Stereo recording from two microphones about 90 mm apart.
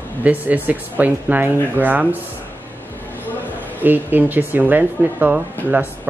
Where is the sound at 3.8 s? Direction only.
20° right (ahead or behind).